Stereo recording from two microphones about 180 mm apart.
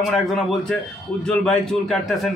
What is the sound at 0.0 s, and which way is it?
A man's voice, centre (ahead or behind).